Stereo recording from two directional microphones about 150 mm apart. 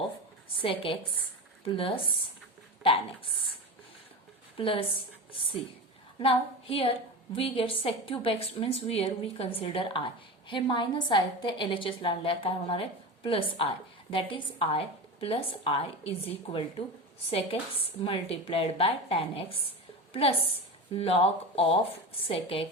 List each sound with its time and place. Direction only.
0.4 s a woman's voice: 35° left (ahead or behind)
4.5 s a woman's voice: 35° left (ahead or behind)
6.1 s a woman's voice: 35° left (ahead or behind)
20.9 s a woman's voice: 40° left (ahead or behind)